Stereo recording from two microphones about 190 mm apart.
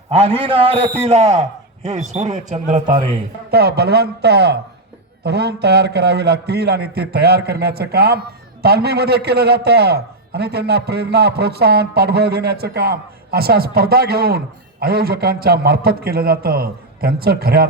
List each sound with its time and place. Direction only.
0.1 s a man's voice: 30° right (ahead or behind)
1.3 s a man's voice: 15° right (ahead or behind)
2.1 s a man's voice: 40° right (ahead or behind)
3.5 s a man's voice: 60° right (ahead or behind)